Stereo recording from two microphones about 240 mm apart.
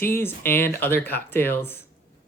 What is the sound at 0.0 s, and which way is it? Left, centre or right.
Speech, centre.